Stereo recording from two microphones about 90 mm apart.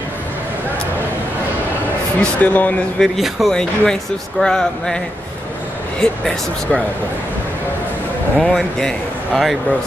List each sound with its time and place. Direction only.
2.1 s speech: 15° left (ahead or behind)
3.0 s a man's voice: centre (ahead or behind)
8.4 s a man's voice: 5° left (ahead or behind)